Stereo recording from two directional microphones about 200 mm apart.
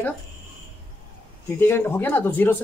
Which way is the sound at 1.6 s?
10° left (ahead or behind).